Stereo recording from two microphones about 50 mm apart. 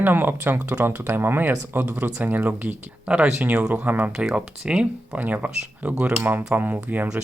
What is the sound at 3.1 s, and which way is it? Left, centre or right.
Speech, right.